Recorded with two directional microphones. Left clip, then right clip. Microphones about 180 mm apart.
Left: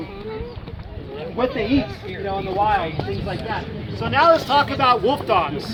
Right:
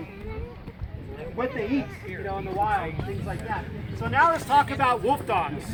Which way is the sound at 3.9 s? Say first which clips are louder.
Left 6 dB; 15° left (ahead or behind).